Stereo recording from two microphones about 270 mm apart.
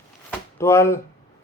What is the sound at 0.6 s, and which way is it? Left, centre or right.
Speech, centre.